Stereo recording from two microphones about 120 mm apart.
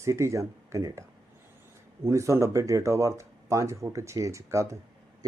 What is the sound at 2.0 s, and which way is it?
Speech, 25° right (ahead or behind).